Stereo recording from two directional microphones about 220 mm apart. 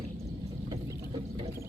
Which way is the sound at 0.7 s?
20° right (ahead or behind).